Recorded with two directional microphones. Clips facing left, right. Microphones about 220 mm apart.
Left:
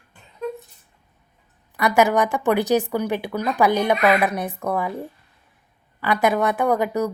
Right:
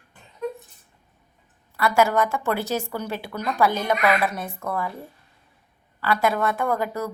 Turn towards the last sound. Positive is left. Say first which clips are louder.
# left 5 dB
turn(degrees=15)  # may be behind; listen again after turning